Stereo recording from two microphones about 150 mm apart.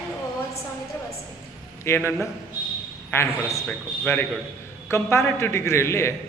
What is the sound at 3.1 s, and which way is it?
A man's voice, 20° left (ahead or behind).